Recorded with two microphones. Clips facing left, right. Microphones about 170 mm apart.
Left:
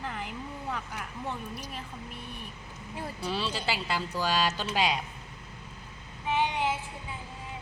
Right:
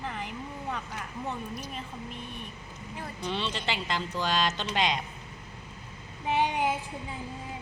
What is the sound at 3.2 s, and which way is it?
Speech, 5° left (ahead or behind).